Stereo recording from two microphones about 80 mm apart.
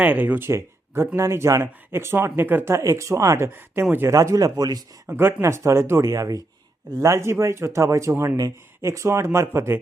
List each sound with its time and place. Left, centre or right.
0.0 s speech: centre
4.1 s speech: right
5.0 s speech: right
8.1 s speech: right
8.4 s speech: right